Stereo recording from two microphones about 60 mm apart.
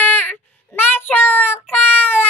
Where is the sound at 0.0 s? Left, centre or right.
Left.